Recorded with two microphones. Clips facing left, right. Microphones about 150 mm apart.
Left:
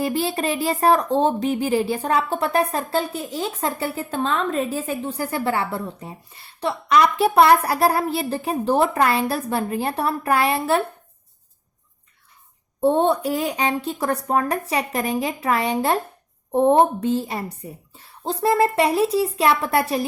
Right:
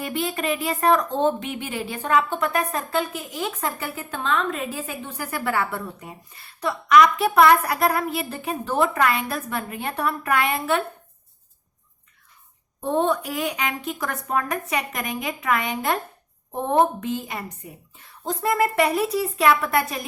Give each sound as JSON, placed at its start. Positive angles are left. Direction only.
{"t": 0.0, "sound": "speech", "side_deg": 35}
{"t": 12.8, "sound": "speech", "side_deg": 30}